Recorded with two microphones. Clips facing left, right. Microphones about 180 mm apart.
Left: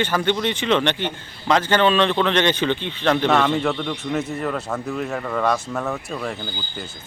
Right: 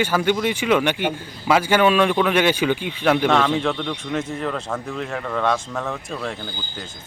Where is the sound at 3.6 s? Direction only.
5° left (ahead or behind).